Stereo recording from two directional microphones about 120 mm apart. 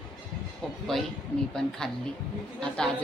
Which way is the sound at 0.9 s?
Centre (ahead or behind).